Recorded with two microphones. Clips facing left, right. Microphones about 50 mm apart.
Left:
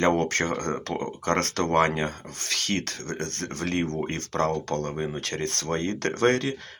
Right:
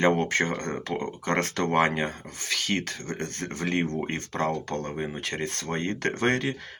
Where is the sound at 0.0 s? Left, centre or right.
Centre.